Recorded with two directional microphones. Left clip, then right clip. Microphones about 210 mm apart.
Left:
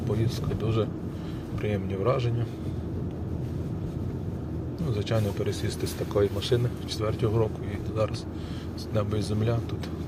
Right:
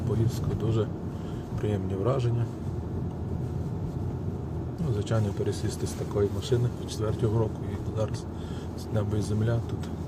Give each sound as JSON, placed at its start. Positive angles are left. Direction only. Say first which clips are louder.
{"t": 0.6, "sound": "speech", "louder": "left 1 dB", "side_deg": -15}
{"t": 5.0, "sound": "speech", "louder": "left 2 dB", "side_deg": -15}
{"t": 6.2, "sound": "speech", "louder": "left 2 dB", "side_deg": 5}
{"t": 7.0, "sound": "speech", "louder": "left 2 dB", "side_deg": -10}
{"t": 9.0, "sound": "speech", "louder": "left 2 dB", "side_deg": -10}